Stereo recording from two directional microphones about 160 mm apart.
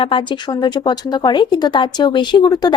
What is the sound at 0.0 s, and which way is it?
A woman's voice, 30° left (ahead or behind).